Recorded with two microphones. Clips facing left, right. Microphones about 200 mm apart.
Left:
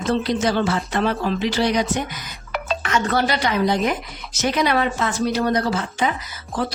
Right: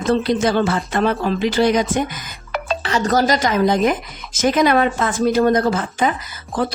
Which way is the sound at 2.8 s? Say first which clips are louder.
Right 4 dB; 35° right (ahead or behind).